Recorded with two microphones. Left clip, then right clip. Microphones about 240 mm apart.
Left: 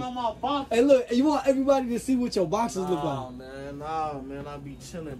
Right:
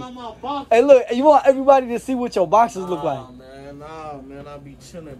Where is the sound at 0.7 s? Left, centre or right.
Left.